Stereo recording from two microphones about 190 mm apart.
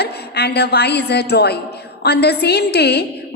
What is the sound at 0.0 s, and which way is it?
A woman's voice, 60° left (ahead or behind).